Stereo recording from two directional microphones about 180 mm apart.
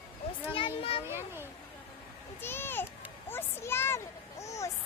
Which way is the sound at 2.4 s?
10° left (ahead or behind).